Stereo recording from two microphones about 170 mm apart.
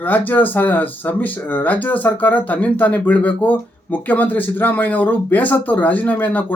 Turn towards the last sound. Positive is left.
turn(degrees=10)  # may be behind; listen again after turning